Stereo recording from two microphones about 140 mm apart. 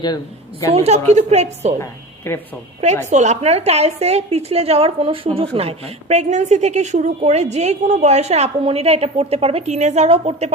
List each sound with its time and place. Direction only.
0.0 s a woman's voice: 30° left (ahead or behind)
0.7 s a woman's voice: 50° right (ahead or behind)
1.8 s a woman's voice: 15° left (ahead or behind)
3.1 s a woman's voice: 55° right (ahead or behind)